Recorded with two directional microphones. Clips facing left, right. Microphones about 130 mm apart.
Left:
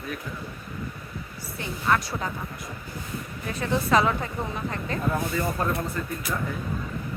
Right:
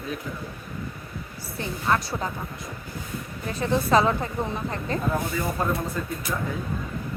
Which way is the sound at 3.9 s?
30° right (ahead or behind).